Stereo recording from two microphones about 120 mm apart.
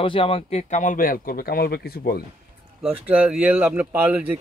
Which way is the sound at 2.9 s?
10° right (ahead or behind).